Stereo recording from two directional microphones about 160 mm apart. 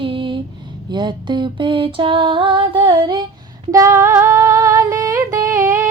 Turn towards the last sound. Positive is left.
turn(degrees=-20)  # may be behind; listen again after turning